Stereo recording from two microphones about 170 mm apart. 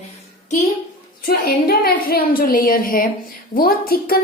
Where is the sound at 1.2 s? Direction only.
60° left (ahead or behind).